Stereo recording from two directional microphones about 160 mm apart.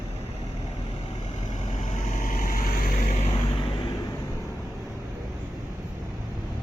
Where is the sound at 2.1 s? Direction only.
60° left (ahead or behind).